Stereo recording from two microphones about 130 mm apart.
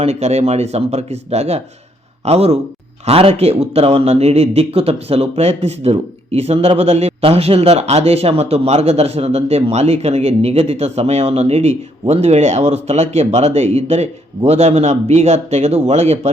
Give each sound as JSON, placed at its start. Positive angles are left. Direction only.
{"t": 0.0, "sound": "a man's voice", "side_deg": -55}